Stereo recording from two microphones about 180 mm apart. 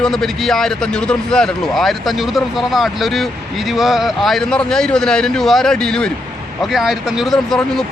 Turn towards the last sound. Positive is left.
turn(degrees=0)  # may be behind; listen again after turning